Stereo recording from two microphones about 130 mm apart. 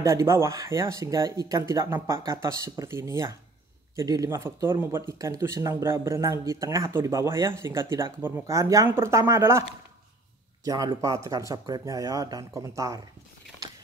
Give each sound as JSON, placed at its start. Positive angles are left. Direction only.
{"t": 0.0, "sound": "speech", "side_deg": -20}